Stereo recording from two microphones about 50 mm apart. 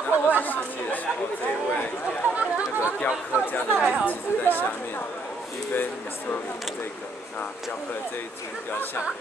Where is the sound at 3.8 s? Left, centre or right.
Left.